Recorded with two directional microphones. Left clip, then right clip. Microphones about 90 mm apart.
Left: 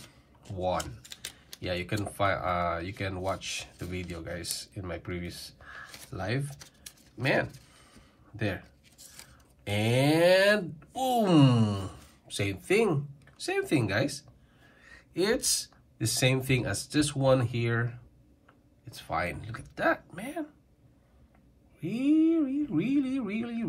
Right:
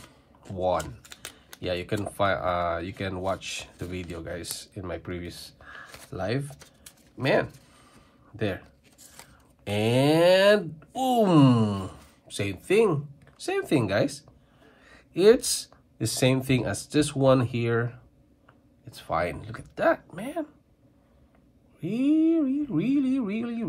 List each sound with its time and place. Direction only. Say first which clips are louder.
0.5 s speech: right 4 dB; 30° right (ahead or behind)
6.1 s speech: right 4 dB; 30° right (ahead or behind)
9.7 s speech: right 4 dB; 30° right (ahead or behind)
10.9 s speech: right 3 dB; 15° right (ahead or behind)
12.3 s speech: right 2 dB; centre (ahead or behind)
13.5 s a sound: right 3 dB; 30° right (ahead or behind)
15.5 s speech: even; 35° right (ahead or behind)
19.0 s speech: right 4 dB; 25° right (ahead or behind)
21.7 s speech: right 2 dB; 30° right (ahead or behind)